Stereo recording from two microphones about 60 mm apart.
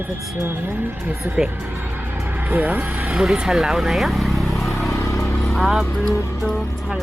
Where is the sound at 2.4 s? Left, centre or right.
Right.